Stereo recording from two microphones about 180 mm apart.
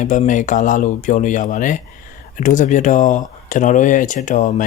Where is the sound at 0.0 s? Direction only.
45° left (ahead or behind).